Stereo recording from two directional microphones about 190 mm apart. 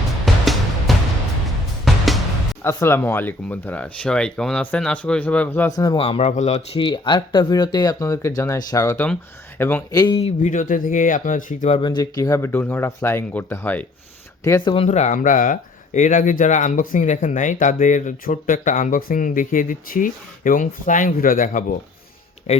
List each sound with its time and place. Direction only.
0.3 s music: centre (ahead or behind)
2.6 s speech: 15° left (ahead or behind)
10.0 s speech: 25° left (ahead or behind)
11.8 s speech: 20° left (ahead or behind)
14.8 s speech: 35° left (ahead or behind)